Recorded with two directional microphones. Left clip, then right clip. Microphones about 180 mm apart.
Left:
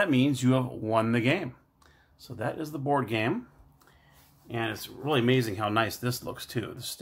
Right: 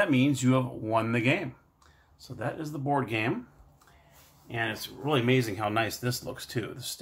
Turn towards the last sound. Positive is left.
turn(degrees=30)  # may be behind; listen again after turning